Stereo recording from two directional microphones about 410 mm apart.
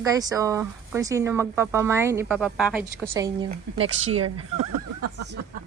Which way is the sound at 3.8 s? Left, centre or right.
Right.